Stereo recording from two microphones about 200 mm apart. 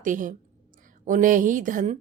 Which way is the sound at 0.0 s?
40° right (ahead or behind).